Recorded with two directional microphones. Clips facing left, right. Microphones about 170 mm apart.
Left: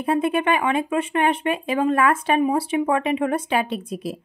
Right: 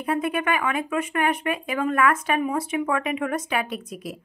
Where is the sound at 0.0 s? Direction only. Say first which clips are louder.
Left 4 dB; 30° left (ahead or behind).